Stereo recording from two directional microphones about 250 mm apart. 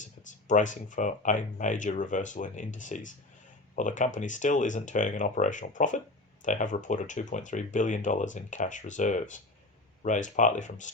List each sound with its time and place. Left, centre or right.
0.0 s speech: left